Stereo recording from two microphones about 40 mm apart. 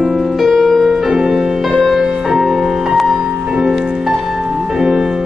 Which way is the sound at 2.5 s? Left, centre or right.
Centre.